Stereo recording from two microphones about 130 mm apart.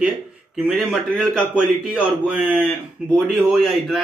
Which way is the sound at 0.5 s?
5° right (ahead or behind).